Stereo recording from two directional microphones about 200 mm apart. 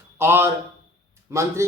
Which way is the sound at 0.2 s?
10° right (ahead or behind).